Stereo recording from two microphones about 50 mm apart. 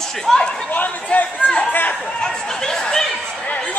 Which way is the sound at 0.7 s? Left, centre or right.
Left.